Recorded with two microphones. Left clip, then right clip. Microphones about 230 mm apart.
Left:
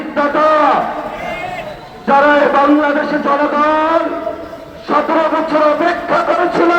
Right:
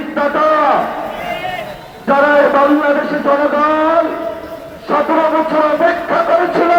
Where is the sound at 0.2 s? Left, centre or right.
Left.